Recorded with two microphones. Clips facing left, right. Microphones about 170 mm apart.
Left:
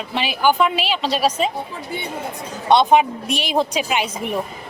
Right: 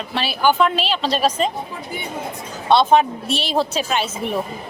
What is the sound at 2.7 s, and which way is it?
A woman's voice, 15° left (ahead or behind).